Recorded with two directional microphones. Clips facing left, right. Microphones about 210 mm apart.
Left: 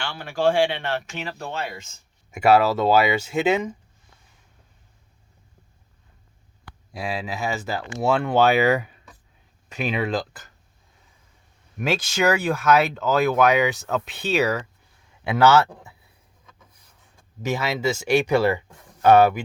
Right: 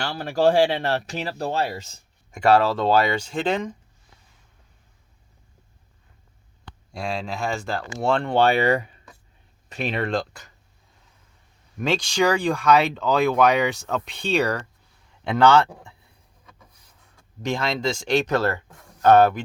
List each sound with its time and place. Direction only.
0.0 s speech: 40° right (ahead or behind)
2.3 s speech: 5° left (ahead or behind)
6.9 s speech: 5° left (ahead or behind)
11.8 s speech: 5° left (ahead or behind)
17.2 s speech: 5° left (ahead or behind)